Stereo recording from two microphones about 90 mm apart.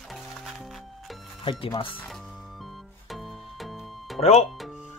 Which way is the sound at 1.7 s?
75° left (ahead or behind).